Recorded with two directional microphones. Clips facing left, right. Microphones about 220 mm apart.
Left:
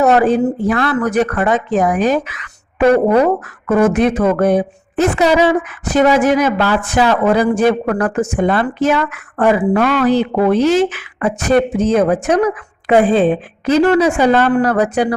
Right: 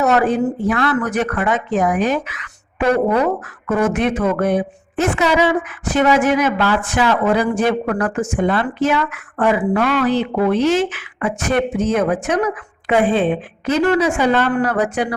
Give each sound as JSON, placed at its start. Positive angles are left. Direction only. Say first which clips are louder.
{"t": 0.0, "sound": "speech", "louder": "left 4 dB", "side_deg": 30}